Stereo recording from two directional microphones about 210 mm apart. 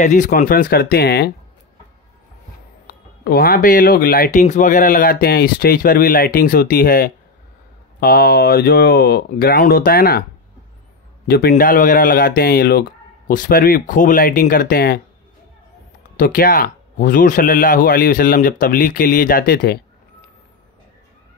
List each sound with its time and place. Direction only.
0.0 s speech: 35° left (ahead or behind)
3.3 s speech: 45° left (ahead or behind)
11.2 s speech: 45° left (ahead or behind)
16.2 s speech: 45° left (ahead or behind)